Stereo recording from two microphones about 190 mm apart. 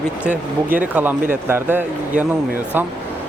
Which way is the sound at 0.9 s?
10° right (ahead or behind).